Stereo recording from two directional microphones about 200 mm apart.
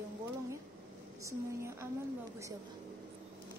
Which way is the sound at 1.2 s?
15° right (ahead or behind).